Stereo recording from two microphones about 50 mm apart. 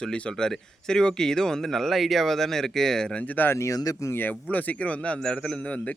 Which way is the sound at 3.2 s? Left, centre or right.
Left.